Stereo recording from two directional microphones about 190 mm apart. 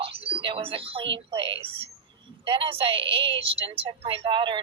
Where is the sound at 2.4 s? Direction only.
25° right (ahead or behind).